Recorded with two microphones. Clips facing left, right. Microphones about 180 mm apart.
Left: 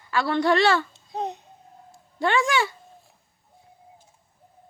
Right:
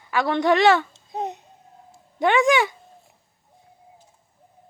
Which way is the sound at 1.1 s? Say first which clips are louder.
Right 1 dB; 20° right (ahead or behind).